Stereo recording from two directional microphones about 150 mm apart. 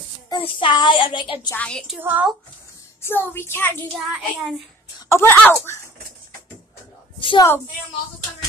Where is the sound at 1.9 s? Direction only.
10° right (ahead or behind).